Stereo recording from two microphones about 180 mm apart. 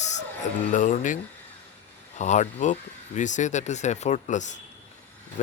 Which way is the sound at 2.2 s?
40° left (ahead or behind).